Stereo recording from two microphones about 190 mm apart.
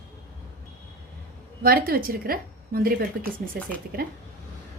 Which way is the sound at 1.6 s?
50° right (ahead or behind).